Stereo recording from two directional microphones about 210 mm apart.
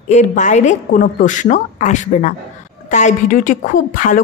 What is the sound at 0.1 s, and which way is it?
Speech, 35° left (ahead or behind).